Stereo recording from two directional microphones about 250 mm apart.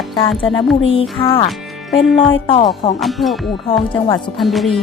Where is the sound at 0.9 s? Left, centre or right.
Left.